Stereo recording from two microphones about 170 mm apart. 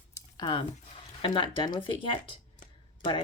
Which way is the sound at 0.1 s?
25° left (ahead or behind).